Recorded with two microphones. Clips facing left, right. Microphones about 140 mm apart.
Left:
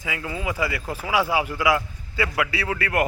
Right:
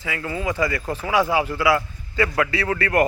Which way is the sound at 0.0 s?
15° left (ahead or behind).